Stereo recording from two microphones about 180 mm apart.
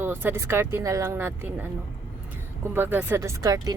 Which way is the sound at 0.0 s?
10° right (ahead or behind).